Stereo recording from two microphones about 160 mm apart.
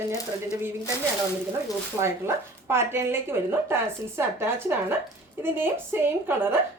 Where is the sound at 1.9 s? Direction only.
10° right (ahead or behind).